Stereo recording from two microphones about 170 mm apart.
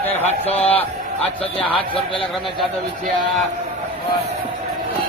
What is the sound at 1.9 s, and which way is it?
Speech, 30° left (ahead or behind).